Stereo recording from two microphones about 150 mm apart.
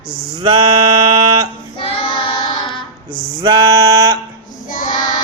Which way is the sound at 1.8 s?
40° left (ahead or behind).